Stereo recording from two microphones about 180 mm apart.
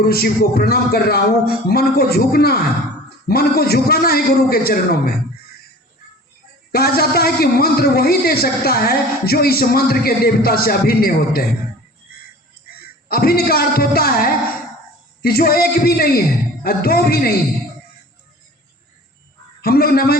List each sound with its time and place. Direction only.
0.0 s a man's voice: 60° left (ahead or behind)
6.7 s a man's voice: 60° left (ahead or behind)
13.1 s a man's voice: 55° left (ahead or behind)
19.6 s a man's voice: 60° left (ahead or behind)